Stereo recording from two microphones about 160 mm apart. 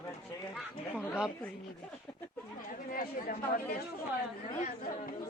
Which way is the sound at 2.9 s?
65° left (ahead or behind).